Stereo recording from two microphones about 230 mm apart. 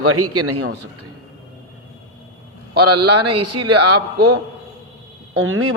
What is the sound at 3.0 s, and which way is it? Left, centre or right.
Speech, right.